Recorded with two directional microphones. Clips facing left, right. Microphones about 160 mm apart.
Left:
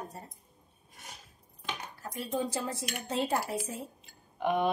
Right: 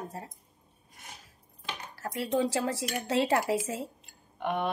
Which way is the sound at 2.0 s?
80° right.